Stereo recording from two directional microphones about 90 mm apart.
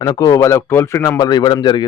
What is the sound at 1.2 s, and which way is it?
Speech, 50° left (ahead or behind).